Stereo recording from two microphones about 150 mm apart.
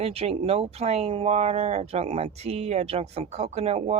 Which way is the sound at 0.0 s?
40° right (ahead or behind).